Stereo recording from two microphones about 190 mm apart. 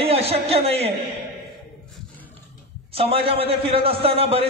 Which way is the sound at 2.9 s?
30° right (ahead or behind).